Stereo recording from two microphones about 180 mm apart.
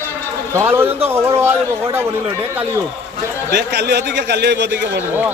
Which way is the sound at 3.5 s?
70° right (ahead or behind).